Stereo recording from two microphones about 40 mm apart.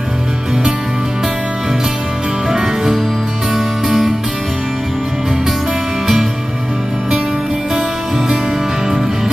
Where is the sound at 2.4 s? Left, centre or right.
Centre.